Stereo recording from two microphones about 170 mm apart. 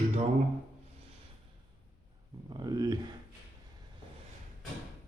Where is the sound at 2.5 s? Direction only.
25° right (ahead or behind).